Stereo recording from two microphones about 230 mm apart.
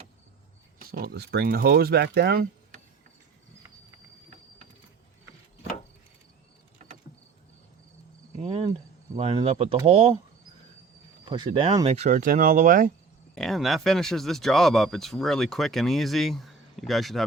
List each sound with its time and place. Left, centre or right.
0.8 s speech: right
8.4 s cricket: right
9.1 s speech: right
11.3 s speech: right
13.3 s speech: centre